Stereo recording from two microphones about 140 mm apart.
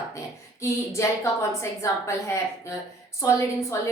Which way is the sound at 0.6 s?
20° left (ahead or behind).